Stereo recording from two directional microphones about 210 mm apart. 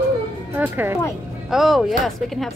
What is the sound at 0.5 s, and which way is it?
A woman's voice, 10° right (ahead or behind).